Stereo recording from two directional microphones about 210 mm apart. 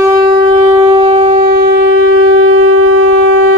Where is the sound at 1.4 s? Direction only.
55° right (ahead or behind).